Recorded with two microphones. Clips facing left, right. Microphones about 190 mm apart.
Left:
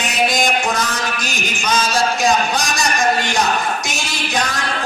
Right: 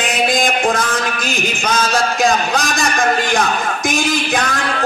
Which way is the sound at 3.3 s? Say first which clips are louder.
Right 1 dB; 55° right (ahead or behind).